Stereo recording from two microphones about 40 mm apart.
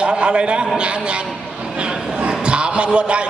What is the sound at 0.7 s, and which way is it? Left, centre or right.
Speech, right.